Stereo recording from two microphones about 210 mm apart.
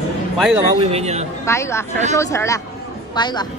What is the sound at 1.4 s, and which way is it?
A woman's voice, 15° left (ahead or behind).